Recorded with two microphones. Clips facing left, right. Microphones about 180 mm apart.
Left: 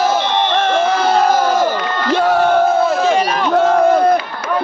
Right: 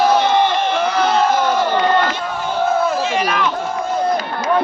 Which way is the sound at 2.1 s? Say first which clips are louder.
Left 11 dB; 80° left.